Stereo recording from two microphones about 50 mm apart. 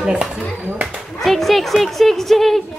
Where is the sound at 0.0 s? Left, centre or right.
Centre.